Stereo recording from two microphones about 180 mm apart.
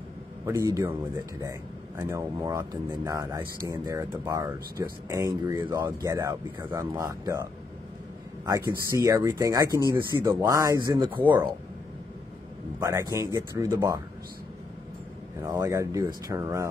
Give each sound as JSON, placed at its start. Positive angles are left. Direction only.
{"t": 0.5, "sound": "speech", "side_deg": -15}
{"t": 8.5, "sound": "speech", "side_deg": -20}
{"t": 12.8, "sound": "speech", "side_deg": -20}
{"t": 15.4, "sound": "speech", "side_deg": -20}